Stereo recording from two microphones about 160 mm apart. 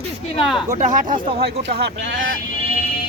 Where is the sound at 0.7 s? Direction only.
50° right (ahead or behind).